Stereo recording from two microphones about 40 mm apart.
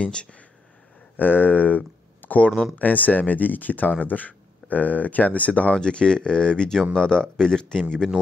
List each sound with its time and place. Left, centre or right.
0.0 s speech: left
1.1 s speech: left
5.8 s speech: left